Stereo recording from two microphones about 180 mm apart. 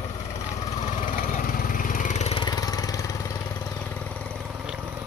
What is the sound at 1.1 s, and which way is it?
Lawn mower, 50° left (ahead or behind).